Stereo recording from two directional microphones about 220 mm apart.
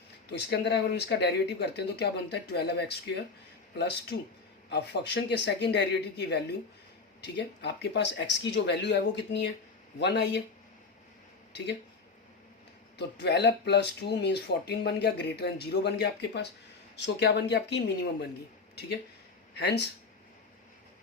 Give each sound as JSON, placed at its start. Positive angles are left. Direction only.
{"t": 0.3, "sound": "speech", "side_deg": 50}
{"t": 11.5, "sound": "speech", "side_deg": 50}
{"t": 13.0, "sound": "speech", "side_deg": 50}
{"t": 19.5, "sound": "speech", "side_deg": 50}